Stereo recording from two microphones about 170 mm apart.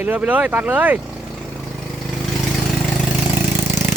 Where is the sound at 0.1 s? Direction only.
10° right (ahead or behind).